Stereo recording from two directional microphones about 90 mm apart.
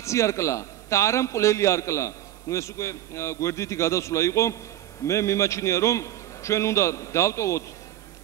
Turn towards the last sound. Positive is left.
turn(degrees=35)  # may be behind; listen again after turning